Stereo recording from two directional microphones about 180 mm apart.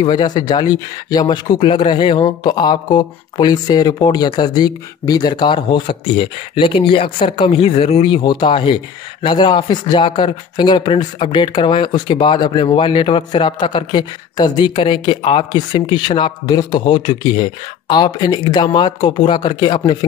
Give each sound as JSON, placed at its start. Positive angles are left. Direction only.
{"t": 0.0, "sound": "speech", "side_deg": 25}